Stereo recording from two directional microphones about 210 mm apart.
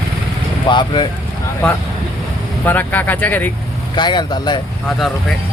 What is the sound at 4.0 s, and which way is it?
Speech, 20° left (ahead or behind).